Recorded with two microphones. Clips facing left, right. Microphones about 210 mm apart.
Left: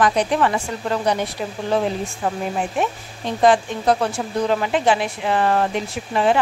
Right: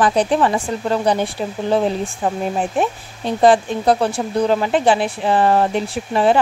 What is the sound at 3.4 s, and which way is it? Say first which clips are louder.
Speech: right 3 dB; 35° right (ahead or behind).